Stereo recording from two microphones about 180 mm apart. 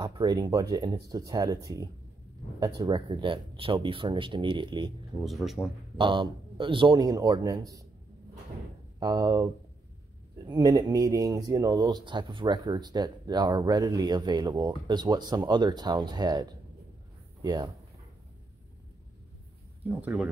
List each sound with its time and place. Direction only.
0.0 s speech: 25° right (ahead or behind)
5.2 s speech: centre (ahead or behind)
5.9 s speech: 25° right (ahead or behind)
9.0 s speech: 20° right (ahead or behind)
19.9 s speech: 10° right (ahead or behind)